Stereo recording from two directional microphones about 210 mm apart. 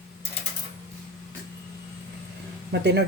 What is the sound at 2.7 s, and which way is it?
Speech, 50° right (ahead or behind).